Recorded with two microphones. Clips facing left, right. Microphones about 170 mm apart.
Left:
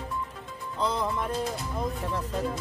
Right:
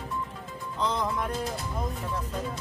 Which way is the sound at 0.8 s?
5° left (ahead or behind).